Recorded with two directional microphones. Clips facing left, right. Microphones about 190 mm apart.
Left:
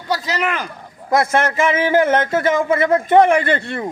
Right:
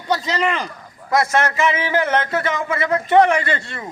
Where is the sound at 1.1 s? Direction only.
50° left (ahead or behind).